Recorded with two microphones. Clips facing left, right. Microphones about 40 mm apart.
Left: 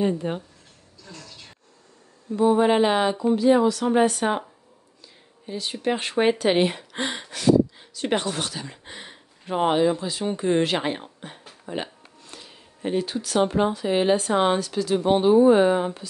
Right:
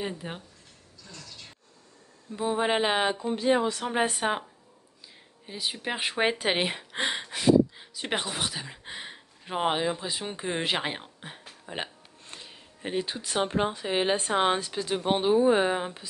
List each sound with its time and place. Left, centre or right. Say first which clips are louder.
0.0 s speech: left 10 dB; centre
2.3 s speech: left 8 dB; centre
3.3 s speech: left 7 dB; right
5.5 s speech: left 6 dB; centre
12.4 s a sound: left 6 dB; centre
13.6 s speech: left 5 dB; right
14.3 s speech: left 4 dB; centre